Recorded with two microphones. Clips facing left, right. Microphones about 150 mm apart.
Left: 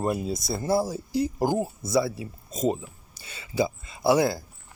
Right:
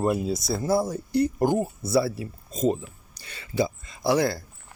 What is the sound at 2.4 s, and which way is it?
Speech, 40° left (ahead or behind).